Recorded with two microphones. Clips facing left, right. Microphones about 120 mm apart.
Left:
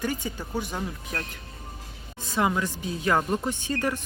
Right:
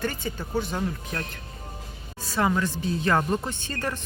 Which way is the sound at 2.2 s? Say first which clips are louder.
Right 1 dB; 15° left (ahead or behind).